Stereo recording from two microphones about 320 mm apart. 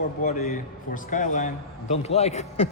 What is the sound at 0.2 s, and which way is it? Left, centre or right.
A man's voice, left.